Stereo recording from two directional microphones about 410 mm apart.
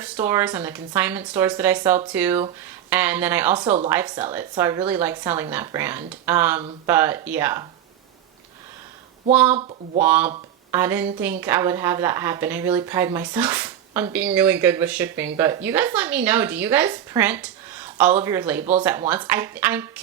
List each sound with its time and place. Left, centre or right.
0.0 s a woman's voice: centre
9.3 s a woman's voice: centre
9.6 s speech: centre
10.0 s a woman's voice: centre
18.6 s speech: centre
18.9 s a woman's voice: centre